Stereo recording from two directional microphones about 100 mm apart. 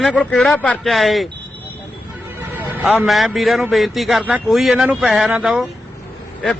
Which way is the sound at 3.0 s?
Centre (ahead or behind).